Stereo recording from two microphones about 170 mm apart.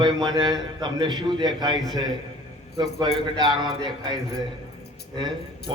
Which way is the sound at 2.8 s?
25° right (ahead or behind).